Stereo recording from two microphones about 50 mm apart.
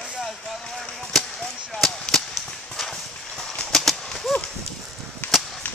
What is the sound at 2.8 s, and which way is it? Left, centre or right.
Clip-clop, centre.